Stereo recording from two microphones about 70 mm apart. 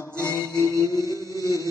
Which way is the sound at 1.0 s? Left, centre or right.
Left.